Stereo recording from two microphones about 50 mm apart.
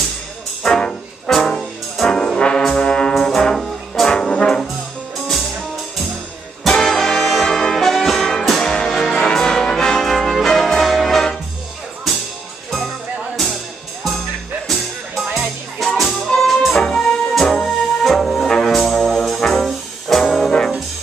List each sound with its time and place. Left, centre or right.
0.7 s music: centre
2.0 s brass instrument: centre
3.3 s music: centre
4.1 s brass instrument: centre
6.6 s brass instrument: centre
9.1 s music: centre
14.7 s music: centre
19.4 s brass instrument: centre